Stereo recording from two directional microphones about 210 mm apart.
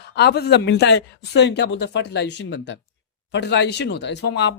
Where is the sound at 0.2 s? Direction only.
50° left (ahead or behind).